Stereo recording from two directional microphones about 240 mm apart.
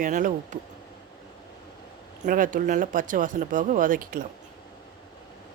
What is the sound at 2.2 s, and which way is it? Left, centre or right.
Speech, right.